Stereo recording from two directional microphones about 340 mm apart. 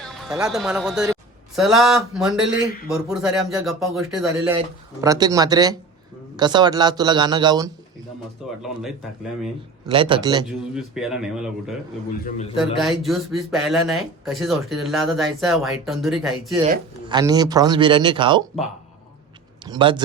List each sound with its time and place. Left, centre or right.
0.0 s a man's voice: centre
8.6 s speech: centre
9.8 s a man's voice: centre
10.8 s speech: centre
12.2 s a man's voice: centre
12.5 s speech: centre
17.1 s a man's voice: centre
19.6 s a man's voice: centre